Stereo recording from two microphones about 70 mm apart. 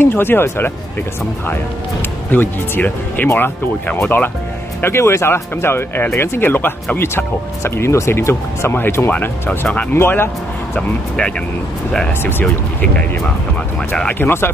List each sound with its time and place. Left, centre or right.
0.0 s speech: left
2.3 s speech: left
7.6 s speech: left
10.8 s speech: centre
12.2 s speech: left
12.4 s speech: centre
14.2 s speech: left